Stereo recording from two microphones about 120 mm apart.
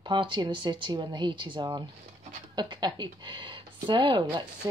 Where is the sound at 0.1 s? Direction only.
40° right (ahead or behind).